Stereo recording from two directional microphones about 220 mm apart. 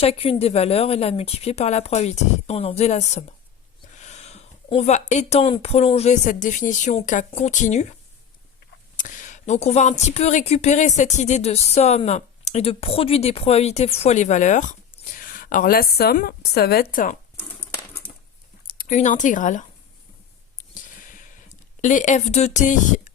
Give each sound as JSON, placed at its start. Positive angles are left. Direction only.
{"t": 0.0, "sound": "a woman's voice", "side_deg": 25}
{"t": 9.0, "sound": "speech", "side_deg": 35}
{"t": 17.7, "sound": "coin", "side_deg": 15}
{"t": 18.7, "sound": "speech", "side_deg": 35}
{"t": 20.7, "sound": "a sound", "side_deg": 35}
{"t": 21.8, "sound": "speech", "side_deg": 35}